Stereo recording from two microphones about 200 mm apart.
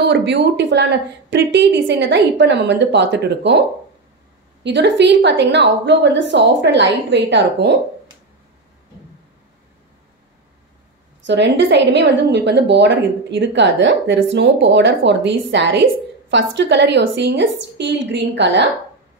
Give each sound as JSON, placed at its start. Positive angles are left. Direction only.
{"t": 0.0, "sound": "a woman's voice", "side_deg": -60}
{"t": 4.6, "sound": "a woman's voice", "side_deg": -60}
{"t": 11.2, "sound": "a woman's voice", "side_deg": -60}